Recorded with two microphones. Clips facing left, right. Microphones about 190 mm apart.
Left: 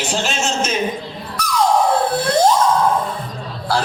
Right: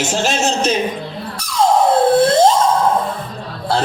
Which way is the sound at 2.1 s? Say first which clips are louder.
Right 6 dB; 25° right (ahead or behind).